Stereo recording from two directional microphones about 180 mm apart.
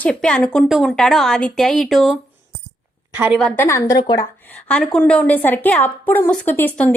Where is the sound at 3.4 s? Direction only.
15° left (ahead or behind).